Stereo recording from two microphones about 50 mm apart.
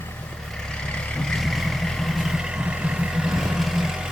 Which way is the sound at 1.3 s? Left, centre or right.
Centre.